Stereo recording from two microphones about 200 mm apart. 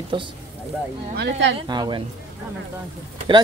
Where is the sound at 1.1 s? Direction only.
60° right (ahead or behind).